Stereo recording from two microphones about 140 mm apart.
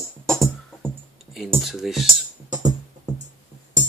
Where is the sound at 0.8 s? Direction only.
Centre (ahead or behind).